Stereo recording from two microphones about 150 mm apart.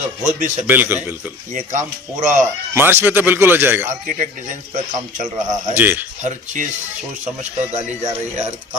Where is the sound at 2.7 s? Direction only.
15° right (ahead or behind).